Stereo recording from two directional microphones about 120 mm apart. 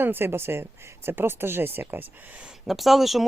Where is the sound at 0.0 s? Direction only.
20° right (ahead or behind).